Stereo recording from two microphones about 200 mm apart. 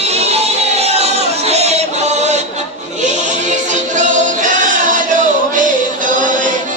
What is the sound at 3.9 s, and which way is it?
Music, 40° right (ahead or behind).